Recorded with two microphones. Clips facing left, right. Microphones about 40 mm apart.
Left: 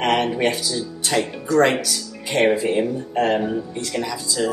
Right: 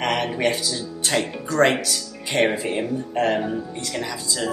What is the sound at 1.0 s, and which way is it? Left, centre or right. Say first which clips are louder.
Speech: left 1 dB; centre.